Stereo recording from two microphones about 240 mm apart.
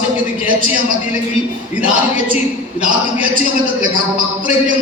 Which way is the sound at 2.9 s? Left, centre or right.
Right.